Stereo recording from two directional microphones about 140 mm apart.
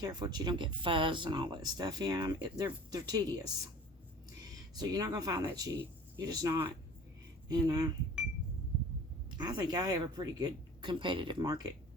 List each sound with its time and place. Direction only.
0.0 s speech: 30° right (ahead or behind)
4.7 s speech: 30° right (ahead or behind)
9.4 s speech: 30° right (ahead or behind)